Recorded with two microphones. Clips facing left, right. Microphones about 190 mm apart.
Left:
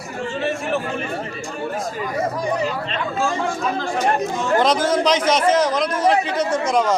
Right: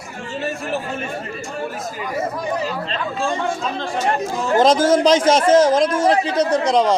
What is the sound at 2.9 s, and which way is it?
Speech, 30° right (ahead or behind).